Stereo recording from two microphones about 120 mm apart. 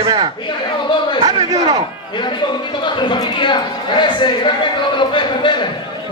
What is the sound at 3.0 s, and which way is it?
A man's voice, 40° left (ahead or behind).